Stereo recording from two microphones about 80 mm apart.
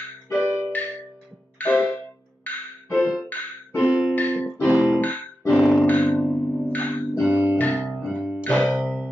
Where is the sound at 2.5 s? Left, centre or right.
Left.